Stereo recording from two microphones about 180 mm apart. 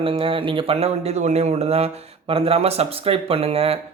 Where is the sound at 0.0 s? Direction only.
30° right (ahead or behind).